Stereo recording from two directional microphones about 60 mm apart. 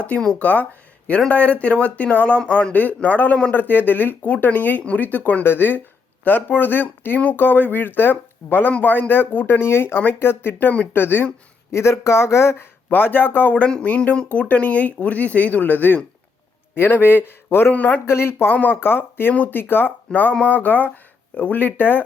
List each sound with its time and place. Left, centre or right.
0.3 s speech: left
3.6 s speech: left
11.7 s speech: left
12.9 s a man's voice: left
17.7 s speech: left
18.0 s speech: left
18.5 s speech: left
18.8 s speech: left
20.1 s speech: centre
20.5 s speech: left